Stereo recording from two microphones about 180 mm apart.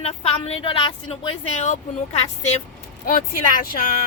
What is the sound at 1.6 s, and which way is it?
A woman's voice, 40° left (ahead or behind).